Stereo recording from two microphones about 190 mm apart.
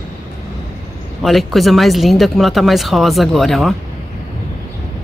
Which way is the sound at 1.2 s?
Centre (ahead or behind).